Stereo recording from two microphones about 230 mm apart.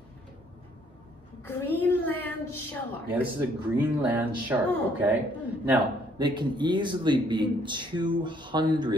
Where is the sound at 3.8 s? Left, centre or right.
Centre.